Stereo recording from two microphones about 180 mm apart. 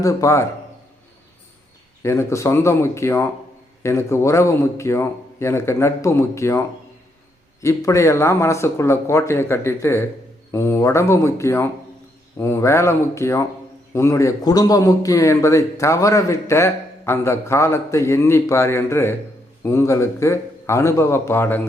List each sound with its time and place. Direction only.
0.0 s speech: 20° left (ahead or behind)
2.0 s speech: 15° left (ahead or behind)
7.6 s speech: 15° left (ahead or behind)